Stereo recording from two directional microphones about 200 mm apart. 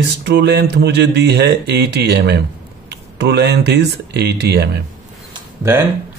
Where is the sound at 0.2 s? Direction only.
60° right (ahead or behind).